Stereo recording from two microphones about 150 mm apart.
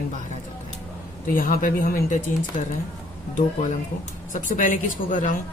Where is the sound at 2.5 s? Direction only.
60° left (ahead or behind).